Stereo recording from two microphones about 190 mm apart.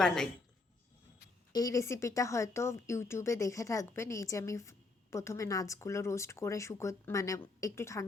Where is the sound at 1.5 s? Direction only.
20° left (ahead or behind).